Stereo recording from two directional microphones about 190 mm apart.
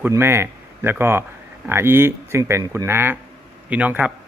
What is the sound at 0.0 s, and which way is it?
Speech, 10° right (ahead or behind).